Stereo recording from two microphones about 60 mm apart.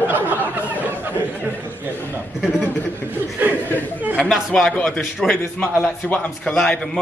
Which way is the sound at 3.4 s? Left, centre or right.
Right.